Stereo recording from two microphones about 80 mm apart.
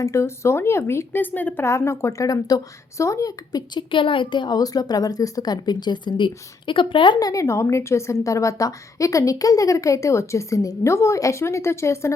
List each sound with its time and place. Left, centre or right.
0.0 s a woman's voice: left
1.6 s a woman's voice: left
3.8 s a woman's voice: left
7.2 s a woman's voice: left